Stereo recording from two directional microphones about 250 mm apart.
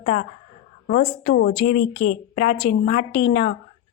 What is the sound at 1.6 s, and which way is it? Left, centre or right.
Speech, left.